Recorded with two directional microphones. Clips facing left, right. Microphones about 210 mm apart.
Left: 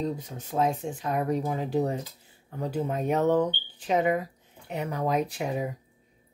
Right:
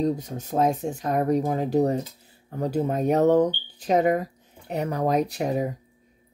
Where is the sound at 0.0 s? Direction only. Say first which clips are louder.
Right 6 dB; 40° right (ahead or behind).